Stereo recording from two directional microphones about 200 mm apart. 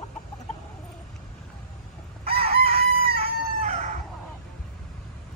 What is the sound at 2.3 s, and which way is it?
Chicken, 30° right (ahead or behind).